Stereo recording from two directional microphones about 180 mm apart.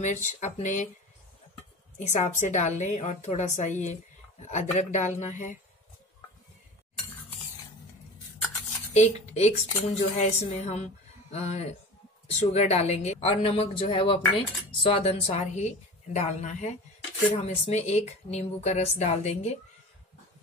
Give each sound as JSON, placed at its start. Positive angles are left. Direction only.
{"t": 0.0, "sound": "speech", "side_deg": 40}
{"t": 2.0, "sound": "a woman's voice", "side_deg": 40}
{"t": 8.9, "sound": "a woman's voice", "side_deg": 35}